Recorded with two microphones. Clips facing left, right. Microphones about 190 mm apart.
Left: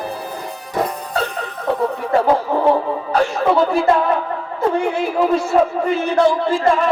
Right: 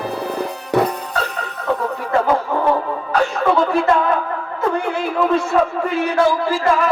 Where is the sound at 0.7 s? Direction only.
70° right (ahead or behind).